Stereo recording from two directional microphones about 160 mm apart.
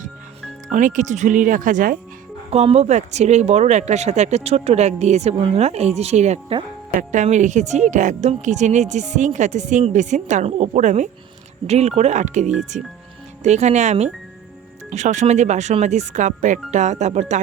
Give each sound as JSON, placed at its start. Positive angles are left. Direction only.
{"t": 0.7, "sound": "speech", "side_deg": -55}
{"t": 2.5, "sound": "speech", "side_deg": -40}